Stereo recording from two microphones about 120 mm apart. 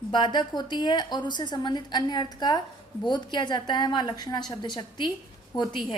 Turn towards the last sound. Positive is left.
turn(degrees=40)  # may be behind; listen again after turning